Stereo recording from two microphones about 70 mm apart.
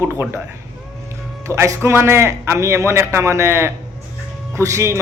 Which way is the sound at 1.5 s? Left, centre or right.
Right.